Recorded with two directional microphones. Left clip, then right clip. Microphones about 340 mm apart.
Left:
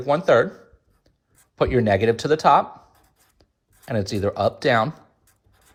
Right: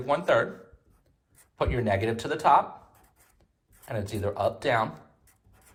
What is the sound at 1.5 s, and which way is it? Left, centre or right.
Speech, centre.